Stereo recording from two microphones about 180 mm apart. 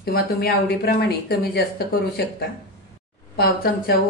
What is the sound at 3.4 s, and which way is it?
Speech, 60° left (ahead or behind).